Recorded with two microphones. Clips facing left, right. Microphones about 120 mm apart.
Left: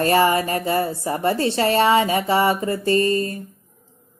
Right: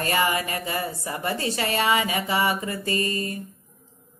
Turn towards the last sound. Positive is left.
turn(degrees=35)  # may be behind; listen again after turning